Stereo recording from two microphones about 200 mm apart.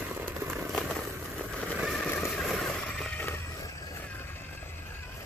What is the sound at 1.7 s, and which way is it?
Vehicle, centre (ahead or behind).